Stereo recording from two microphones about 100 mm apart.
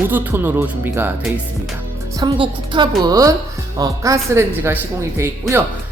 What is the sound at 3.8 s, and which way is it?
Speech, 30° right (ahead or behind).